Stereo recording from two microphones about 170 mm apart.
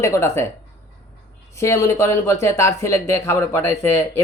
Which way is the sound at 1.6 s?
15° left (ahead or behind).